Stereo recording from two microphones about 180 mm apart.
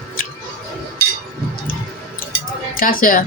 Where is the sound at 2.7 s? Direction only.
50° left (ahead or behind).